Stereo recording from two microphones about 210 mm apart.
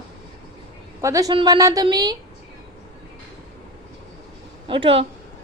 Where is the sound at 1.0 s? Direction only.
15° right (ahead or behind).